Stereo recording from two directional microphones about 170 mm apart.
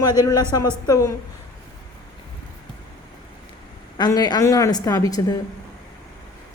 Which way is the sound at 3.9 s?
25° left (ahead or behind).